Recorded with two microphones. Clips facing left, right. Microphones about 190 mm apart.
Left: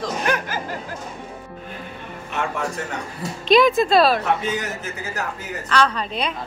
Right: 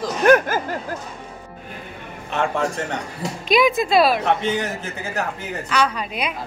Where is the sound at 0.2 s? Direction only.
50° right (ahead or behind).